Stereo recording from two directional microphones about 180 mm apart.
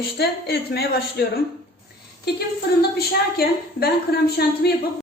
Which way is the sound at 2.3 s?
60° left (ahead or behind).